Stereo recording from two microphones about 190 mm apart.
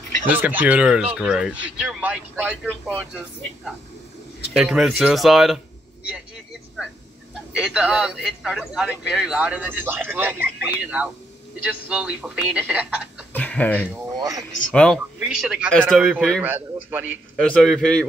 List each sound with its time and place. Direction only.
0.3 s speech: 10° right (ahead or behind)
7.5 s speech: 5° right (ahead or behind)
13.3 s speech: 10° left (ahead or behind)
13.8 s speech: 20° right (ahead or behind)
14.7 s speech: 5° left (ahead or behind)
17.5 s speech: centre (ahead or behind)